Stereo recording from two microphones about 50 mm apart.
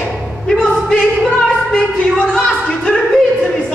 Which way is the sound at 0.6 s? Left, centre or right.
Centre.